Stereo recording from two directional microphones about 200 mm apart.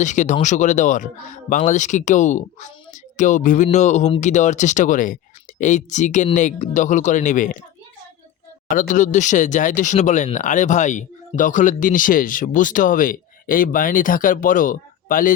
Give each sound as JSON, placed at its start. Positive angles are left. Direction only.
{"t": 0.0, "sound": "speech", "side_deg": 40}
{"t": 8.7, "sound": "speech", "side_deg": 40}